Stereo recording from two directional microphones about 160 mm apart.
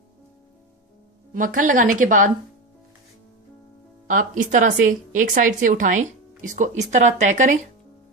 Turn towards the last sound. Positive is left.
turn(degrees=-50)  # may be behind; listen again after turning